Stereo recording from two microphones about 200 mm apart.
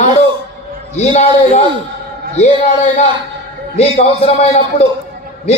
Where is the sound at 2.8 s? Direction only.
35° left (ahead or behind).